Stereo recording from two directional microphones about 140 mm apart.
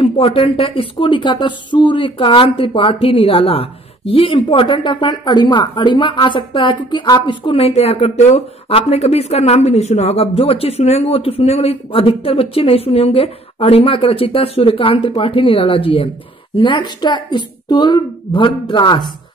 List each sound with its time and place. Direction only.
0.0 s a woman's voice: 40° left (ahead or behind)